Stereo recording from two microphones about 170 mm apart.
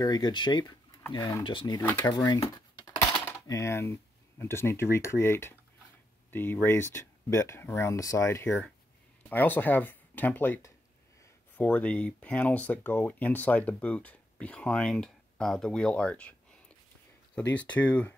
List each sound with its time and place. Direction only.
0.0 s speech: 25° left (ahead or behind)
1.4 s speech: 30° left (ahead or behind)
1.8 s speech: 15° left (ahead or behind)
2.1 s a sound: 25° left (ahead or behind)
3.3 s speech: 15° left (ahead or behind)
8.5 s speech: centre (ahead or behind)
9.3 s speech: 10° left (ahead or behind)
17.4 s speech: 10° left (ahead or behind)